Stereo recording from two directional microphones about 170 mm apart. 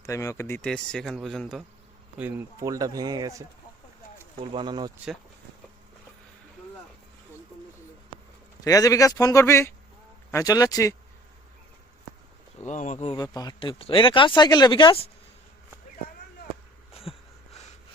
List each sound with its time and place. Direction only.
0.0 s speech: 15° left (ahead or behind)
0.6 s speech: 5° left (ahead or behind)
2.6 s a man's voice: 20° right (ahead or behind)
4.5 s a man's voice: 25° right (ahead or behind)
8.6 s speech: 20° left (ahead or behind)
12.6 s speech: 45° left (ahead or behind)
13.1 s speech: 25° left (ahead or behind)
16.9 s a sound: 35° left (ahead or behind)